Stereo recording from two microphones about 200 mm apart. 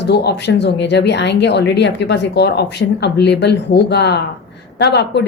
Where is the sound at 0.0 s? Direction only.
55° left (ahead or behind).